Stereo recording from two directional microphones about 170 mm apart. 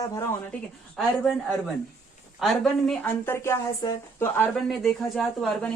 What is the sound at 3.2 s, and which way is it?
Speech, 15° left (ahead or behind).